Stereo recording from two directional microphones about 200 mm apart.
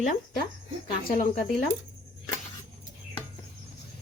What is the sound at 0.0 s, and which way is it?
Speech, 45° left (ahead or behind).